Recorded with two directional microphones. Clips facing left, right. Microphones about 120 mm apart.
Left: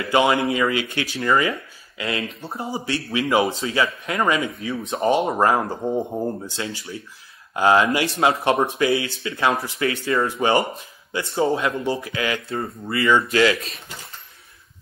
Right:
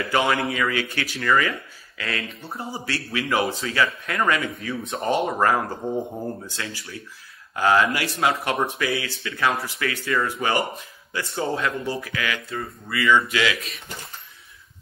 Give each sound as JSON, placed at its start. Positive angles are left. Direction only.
{"t": 0.1, "sound": "speech", "side_deg": 20}